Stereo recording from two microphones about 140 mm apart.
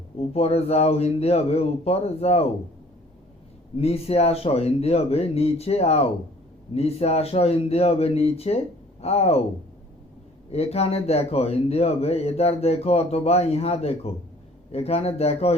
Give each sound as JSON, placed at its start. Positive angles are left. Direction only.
{"t": 0.2, "sound": "a man's voice", "side_deg": 45}
{"t": 3.8, "sound": "a man's voice", "side_deg": 45}
{"t": 10.5, "sound": "a man's voice", "side_deg": 45}